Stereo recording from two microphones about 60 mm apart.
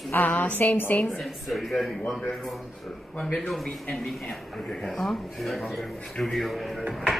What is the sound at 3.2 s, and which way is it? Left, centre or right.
Speech, centre.